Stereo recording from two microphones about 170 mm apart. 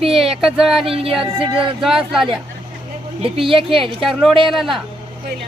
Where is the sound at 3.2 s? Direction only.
30° right (ahead or behind).